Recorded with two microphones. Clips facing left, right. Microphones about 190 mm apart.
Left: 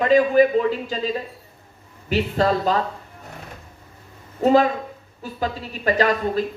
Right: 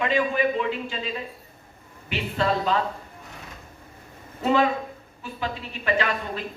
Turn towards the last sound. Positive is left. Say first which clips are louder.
# left 6 dB
turn(degrees=40)  # may be behind; listen again after turning